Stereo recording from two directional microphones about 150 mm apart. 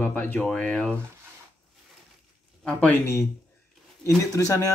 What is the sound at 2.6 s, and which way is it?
Speech, 10° left (ahead or behind).